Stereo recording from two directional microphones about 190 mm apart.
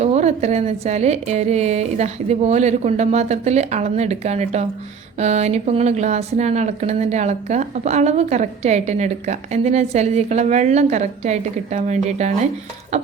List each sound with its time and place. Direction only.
0.0 s speech: 35° right (ahead or behind)